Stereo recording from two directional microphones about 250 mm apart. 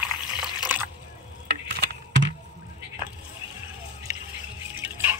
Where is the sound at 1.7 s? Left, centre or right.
Right.